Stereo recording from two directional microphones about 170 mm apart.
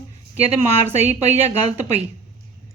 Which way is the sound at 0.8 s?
10° right (ahead or behind).